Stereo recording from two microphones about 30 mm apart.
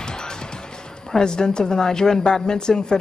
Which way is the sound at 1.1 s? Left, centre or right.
Left.